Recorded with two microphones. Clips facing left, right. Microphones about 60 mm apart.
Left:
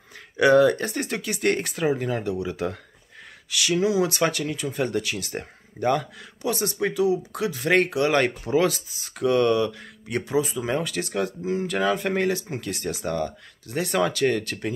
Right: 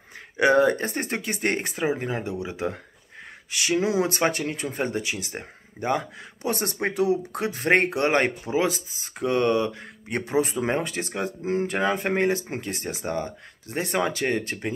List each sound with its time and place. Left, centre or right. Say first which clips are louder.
0.4 s speech: left 2 dB; right
6.4 s speech: left 1 dB; right
8.5 s speech: left 3 dB; right
10.8 s speech: left 2 dB; right